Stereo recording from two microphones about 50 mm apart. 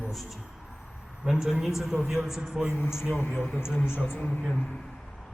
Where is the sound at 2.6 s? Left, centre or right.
Left.